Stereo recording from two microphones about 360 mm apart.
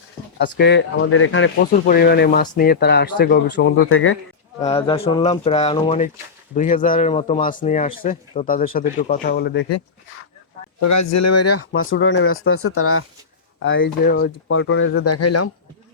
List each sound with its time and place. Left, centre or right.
0.3 s speech: left
4.6 s speech: centre
10.8 s speech: left